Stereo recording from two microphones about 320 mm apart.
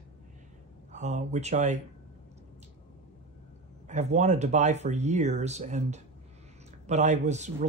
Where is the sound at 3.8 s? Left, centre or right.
Right.